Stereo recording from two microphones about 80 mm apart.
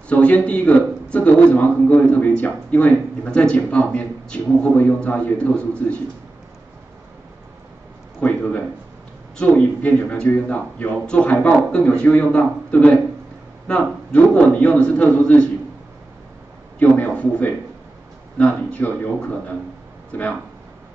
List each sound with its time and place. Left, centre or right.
0.1 s a man's voice: centre
8.2 s a man's voice: centre
16.8 s a sound: left
18.4 s a man's voice: centre